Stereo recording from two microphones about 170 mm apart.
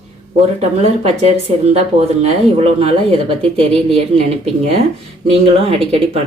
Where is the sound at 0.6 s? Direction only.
35° right (ahead or behind).